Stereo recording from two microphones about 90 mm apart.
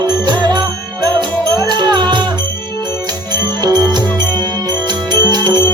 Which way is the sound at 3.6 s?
45° right (ahead or behind).